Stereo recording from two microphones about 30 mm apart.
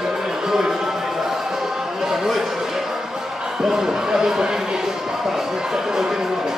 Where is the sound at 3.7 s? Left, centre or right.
Right.